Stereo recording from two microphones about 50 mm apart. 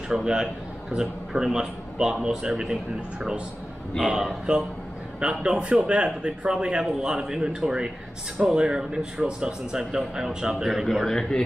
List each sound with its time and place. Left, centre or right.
0.1 s a man's voice: centre
4.5 s a man's voice: centre
11.1 s a man's voice: centre